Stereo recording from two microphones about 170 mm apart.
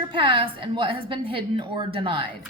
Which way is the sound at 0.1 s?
30° right (ahead or behind).